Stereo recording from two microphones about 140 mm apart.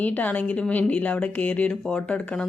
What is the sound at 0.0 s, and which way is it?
A woman's voice, 10° left (ahead or behind).